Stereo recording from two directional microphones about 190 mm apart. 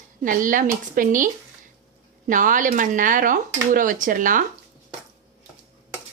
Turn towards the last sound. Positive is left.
turn(degrees=-45)  # may be behind; listen again after turning